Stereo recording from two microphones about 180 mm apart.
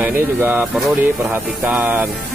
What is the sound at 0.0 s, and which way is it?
Speech, 10° right (ahead or behind).